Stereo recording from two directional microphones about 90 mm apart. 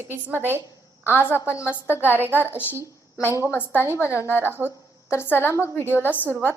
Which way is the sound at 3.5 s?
20° left (ahead or behind).